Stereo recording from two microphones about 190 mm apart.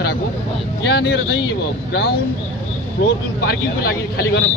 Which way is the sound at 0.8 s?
65° left (ahead or behind).